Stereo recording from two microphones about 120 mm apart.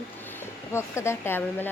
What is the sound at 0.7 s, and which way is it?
Speech, 20° left (ahead or behind).